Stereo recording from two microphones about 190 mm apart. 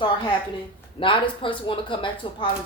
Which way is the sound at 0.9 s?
25° left (ahead or behind).